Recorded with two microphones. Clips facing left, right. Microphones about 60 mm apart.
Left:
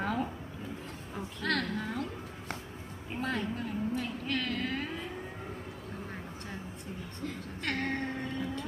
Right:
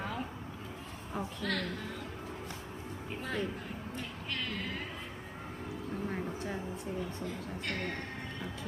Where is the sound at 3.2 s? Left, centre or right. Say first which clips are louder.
Left 3 dB; left.